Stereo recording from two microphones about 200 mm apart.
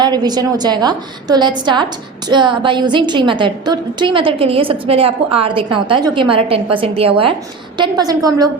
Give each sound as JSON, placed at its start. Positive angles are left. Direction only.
{"t": 0.0, "sound": "a woman's voice", "side_deg": -20}